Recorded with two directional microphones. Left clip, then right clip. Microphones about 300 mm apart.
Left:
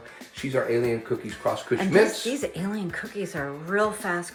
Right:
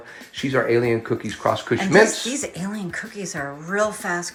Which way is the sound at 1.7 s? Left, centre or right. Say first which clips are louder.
Right 3 dB; right.